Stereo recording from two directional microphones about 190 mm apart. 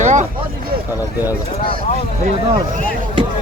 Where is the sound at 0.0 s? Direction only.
40° right (ahead or behind).